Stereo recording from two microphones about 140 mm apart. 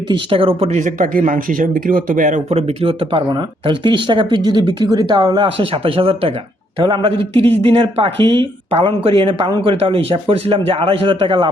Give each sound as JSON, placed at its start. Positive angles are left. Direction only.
{"t": 0.1, "sound": "speech", "side_deg": -40}
{"t": 0.8, "sound": "speech", "side_deg": -65}